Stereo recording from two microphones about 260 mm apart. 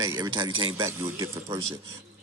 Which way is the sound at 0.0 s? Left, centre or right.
Centre.